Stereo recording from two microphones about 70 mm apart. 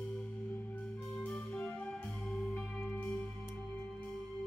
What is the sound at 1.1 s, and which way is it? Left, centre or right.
Music, centre.